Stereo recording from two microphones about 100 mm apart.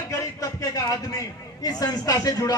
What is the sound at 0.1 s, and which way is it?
A man's voice, 35° left (ahead or behind).